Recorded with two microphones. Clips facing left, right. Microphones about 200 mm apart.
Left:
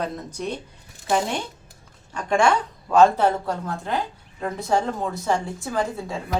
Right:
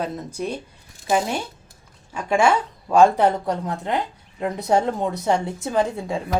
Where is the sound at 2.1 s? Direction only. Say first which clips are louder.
Right 1 dB; 5° right (ahead or behind).